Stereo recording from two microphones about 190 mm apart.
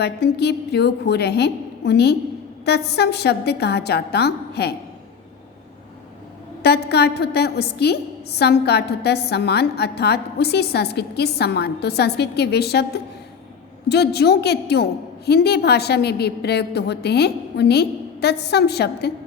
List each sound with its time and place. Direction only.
0.0 s a woman's voice: 60° left (ahead or behind)
6.6 s a woman's voice: 60° left (ahead or behind)